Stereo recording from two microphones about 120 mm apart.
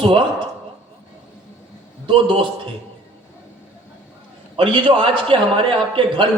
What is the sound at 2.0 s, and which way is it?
Speech, 45° right (ahead or behind).